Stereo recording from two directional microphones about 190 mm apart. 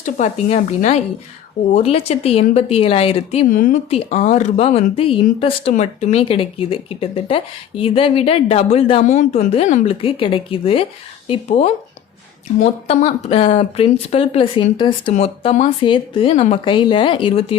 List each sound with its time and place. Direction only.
0.0 s speech: 40° left (ahead or behind)
3.5 s a woman's voice: 45° left (ahead or behind); by 17.6 s 30° left (ahead or behind)